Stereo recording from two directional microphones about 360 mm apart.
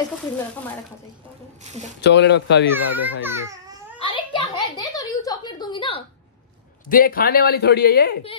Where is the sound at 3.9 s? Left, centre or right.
Centre.